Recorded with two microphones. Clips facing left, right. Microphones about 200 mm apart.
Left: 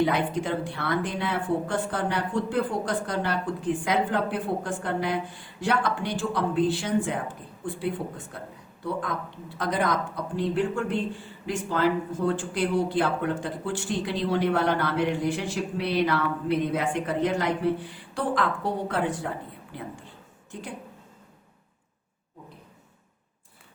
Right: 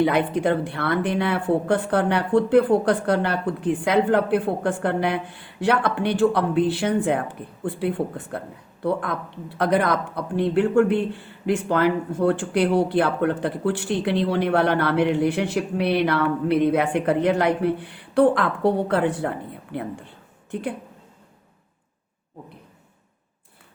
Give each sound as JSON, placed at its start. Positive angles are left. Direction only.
{"t": 0.0, "sound": "speech", "side_deg": -60}